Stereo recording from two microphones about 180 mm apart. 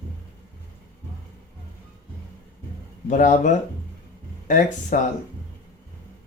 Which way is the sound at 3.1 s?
45° left (ahead or behind).